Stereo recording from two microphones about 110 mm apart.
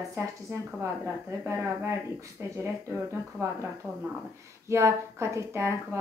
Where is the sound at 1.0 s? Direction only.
25° right (ahead or behind).